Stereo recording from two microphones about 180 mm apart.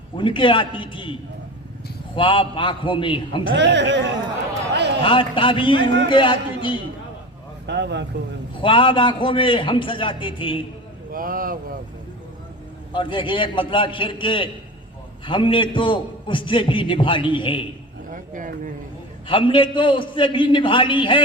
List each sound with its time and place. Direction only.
0.2 s a man's voice: 30° left (ahead or behind)
2.1 s a man's voice: 30° left (ahead or behind)
3.5 s speech: 75° right (ahead or behind)
5.0 s a man's voice: 30° left (ahead or behind)
7.7 s speech: 70° right (ahead or behind)
8.6 s a man's voice: 30° left (ahead or behind)
11.1 s speech: 50° right (ahead or behind)
12.9 s a man's voice: 25° left (ahead or behind)
18.1 s speech: 45° right (ahead or behind)
19.3 s a man's voice: 30° left (ahead or behind)